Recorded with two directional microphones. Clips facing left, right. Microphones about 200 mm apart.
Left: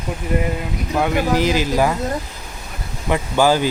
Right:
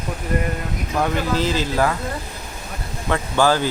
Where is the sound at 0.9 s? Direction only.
10° left (ahead or behind).